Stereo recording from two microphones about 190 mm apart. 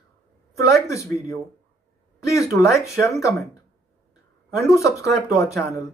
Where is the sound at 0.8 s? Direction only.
15° left (ahead or behind).